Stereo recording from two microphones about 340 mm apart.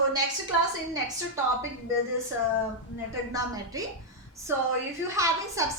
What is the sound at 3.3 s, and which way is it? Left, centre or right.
Speech, centre.